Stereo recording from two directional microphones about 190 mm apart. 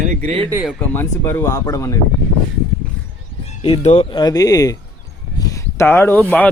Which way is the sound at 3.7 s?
35° left (ahead or behind).